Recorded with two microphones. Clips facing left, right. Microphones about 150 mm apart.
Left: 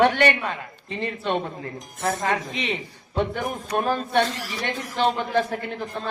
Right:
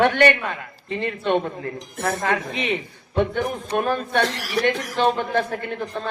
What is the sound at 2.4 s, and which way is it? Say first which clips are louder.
Speech: right 3 dB; 50° right (ahead or behind).